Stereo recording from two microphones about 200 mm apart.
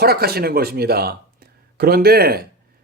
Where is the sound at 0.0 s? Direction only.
50° right (ahead or behind).